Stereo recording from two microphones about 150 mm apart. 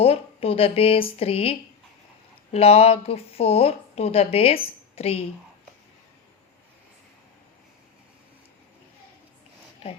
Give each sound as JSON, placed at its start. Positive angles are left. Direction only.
{"t": 0.0, "sound": "speech", "side_deg": 40}